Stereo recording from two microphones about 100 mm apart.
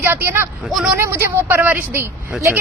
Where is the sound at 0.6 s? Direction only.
5° right (ahead or behind).